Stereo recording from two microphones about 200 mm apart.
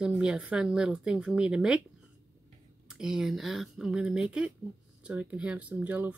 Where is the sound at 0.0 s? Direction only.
5° right (ahead or behind).